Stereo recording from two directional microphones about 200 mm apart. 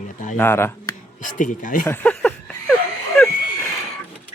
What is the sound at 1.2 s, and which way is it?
Speech, 40° left (ahead or behind).